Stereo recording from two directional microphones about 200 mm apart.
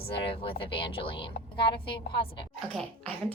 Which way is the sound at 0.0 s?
25° left (ahead or behind).